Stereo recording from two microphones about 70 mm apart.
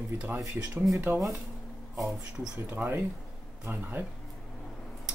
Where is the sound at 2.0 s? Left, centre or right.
Centre.